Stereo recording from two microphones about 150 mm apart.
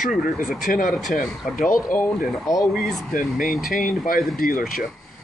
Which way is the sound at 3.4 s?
Centre (ahead or behind).